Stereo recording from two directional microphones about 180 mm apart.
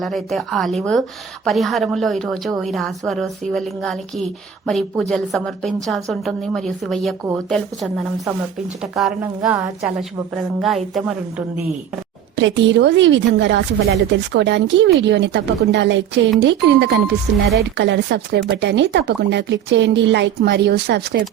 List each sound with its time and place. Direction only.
0.0 s a woman's voice: centre (ahead or behind)
12.4 s a woman's voice: 90° right; by 21.2 s 65° right (ahead or behind)